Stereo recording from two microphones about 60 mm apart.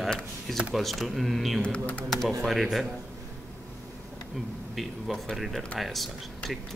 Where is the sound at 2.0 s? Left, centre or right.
Centre.